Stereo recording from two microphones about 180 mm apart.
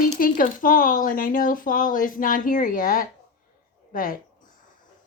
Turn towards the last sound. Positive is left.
turn(degrees=50)  # may be behind; listen again after turning